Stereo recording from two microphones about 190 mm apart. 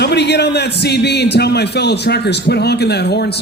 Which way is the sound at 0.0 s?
60° left (ahead or behind).